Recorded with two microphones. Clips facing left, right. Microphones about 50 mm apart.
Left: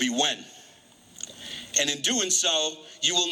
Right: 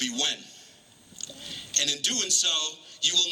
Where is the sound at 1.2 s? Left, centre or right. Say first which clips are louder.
Left 1 dB; left.